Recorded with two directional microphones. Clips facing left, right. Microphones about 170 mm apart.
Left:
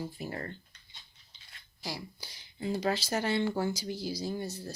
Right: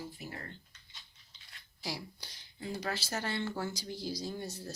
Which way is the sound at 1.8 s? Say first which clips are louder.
Left 1 dB; centre (ahead or behind).